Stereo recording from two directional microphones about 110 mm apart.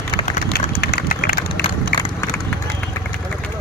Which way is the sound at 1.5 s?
50° left (ahead or behind).